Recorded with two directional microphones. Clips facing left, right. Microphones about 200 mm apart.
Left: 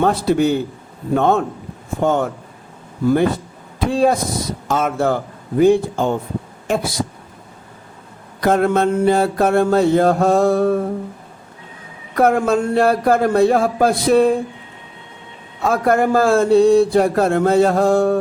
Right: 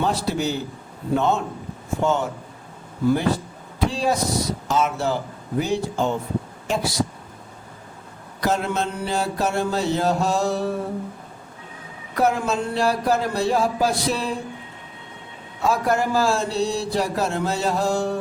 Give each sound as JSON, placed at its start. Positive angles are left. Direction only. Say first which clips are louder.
{"t": 0.0, "sound": "mantra", "louder": "left 8 dB", "side_deg": 55}
{"t": 1.1, "sound": "speech", "louder": "left 5 dB", "side_deg": 55}
{"t": 3.8, "sound": "mantra", "louder": "left 6 dB", "side_deg": 55}
{"t": 8.4, "sound": "mantra", "louder": "left 8 dB", "side_deg": 55}
{"t": 12.1, "sound": "mantra", "louder": "left 6 dB", "side_deg": 55}
{"t": 15.7, "sound": "speech", "louder": "left 6 dB", "side_deg": 55}